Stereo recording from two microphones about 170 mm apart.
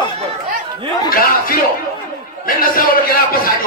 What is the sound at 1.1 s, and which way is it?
A man's voice, 60° left (ahead or behind).